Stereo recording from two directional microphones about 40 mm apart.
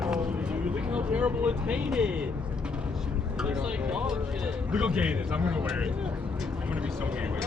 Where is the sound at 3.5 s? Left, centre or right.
Right.